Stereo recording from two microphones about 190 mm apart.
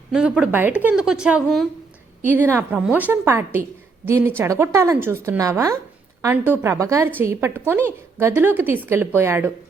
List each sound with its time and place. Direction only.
0.1 s a woman's voice: 5° right (ahead or behind)